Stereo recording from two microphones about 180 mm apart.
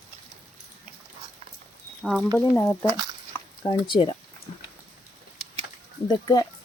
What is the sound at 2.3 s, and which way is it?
Speech, 10° left (ahead or behind).